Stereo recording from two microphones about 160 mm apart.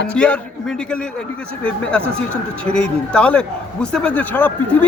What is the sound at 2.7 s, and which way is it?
A man's voice, 5° left (ahead or behind).